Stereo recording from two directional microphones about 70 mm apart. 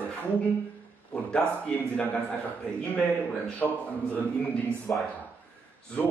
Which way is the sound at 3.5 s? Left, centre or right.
Left.